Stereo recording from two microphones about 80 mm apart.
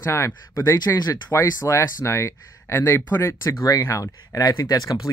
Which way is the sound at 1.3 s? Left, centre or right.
Left.